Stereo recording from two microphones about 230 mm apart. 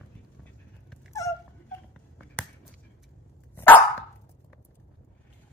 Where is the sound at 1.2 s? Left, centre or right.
Centre.